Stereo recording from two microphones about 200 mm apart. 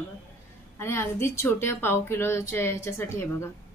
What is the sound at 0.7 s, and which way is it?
A woman's voice, 10° left (ahead or behind).